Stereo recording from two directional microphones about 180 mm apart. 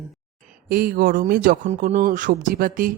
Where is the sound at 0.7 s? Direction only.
55° right (ahead or behind).